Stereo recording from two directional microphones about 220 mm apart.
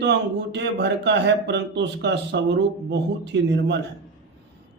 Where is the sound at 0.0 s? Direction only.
50° right (ahead or behind).